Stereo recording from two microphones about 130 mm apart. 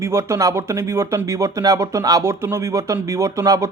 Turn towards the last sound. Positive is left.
turn(degrees=-25)  # may be behind; listen again after turning